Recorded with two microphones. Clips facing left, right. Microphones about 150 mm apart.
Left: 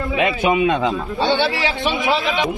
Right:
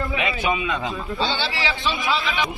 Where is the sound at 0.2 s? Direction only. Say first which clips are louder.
Left 10 dB; 55° left (ahead or behind).